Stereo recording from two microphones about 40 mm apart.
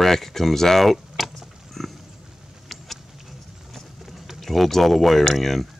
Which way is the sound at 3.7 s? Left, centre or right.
Centre.